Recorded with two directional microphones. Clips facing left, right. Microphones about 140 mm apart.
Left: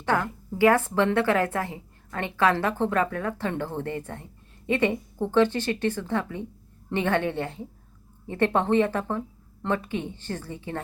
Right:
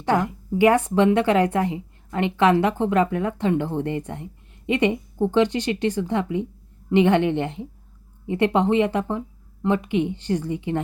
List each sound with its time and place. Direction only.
0.0 s speech: 15° right (ahead or behind)